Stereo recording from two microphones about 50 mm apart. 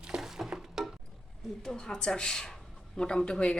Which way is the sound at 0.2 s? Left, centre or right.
Centre.